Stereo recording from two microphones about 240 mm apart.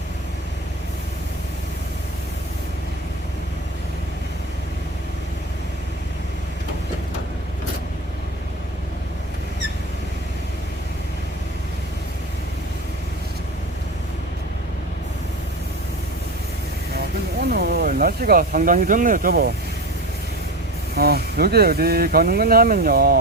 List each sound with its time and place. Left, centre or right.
17.5 s speech: right
20.9 s speech: right